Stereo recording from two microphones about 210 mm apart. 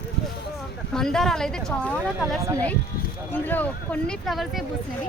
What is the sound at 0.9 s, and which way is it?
Speech, 5° left (ahead or behind).